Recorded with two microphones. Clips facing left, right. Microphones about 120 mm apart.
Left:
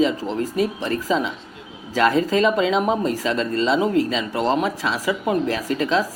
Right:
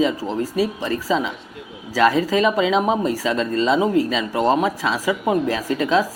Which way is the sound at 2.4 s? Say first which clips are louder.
Right 1 dB; 5° right (ahead or behind).